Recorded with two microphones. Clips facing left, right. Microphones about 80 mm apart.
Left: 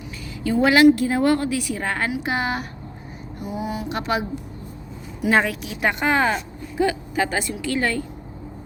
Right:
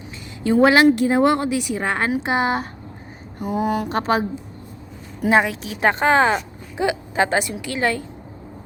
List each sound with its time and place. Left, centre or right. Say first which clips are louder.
0.4 s speech: right 1 dB; right
3.4 s mantra: right 6 dB; right
5.3 s speech: right 2 dB; right
5.6 s speech: right 4 dB; right